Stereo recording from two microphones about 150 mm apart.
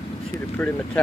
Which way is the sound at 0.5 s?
10° left (ahead or behind).